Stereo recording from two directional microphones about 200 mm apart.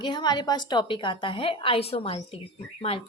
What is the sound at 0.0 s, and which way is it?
A woman's voice, 20° left (ahead or behind).